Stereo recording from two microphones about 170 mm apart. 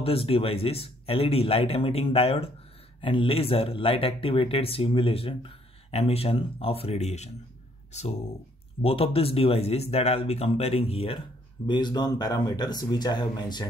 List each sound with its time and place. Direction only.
0.0 s speech: 35° left (ahead or behind)
11.6 s speech: 25° left (ahead or behind)